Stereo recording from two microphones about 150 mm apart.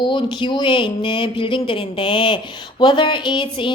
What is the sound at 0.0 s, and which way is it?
A woman's voice, 30° left (ahead or behind).